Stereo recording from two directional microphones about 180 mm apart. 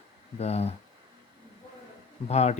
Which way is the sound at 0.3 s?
35° left (ahead or behind).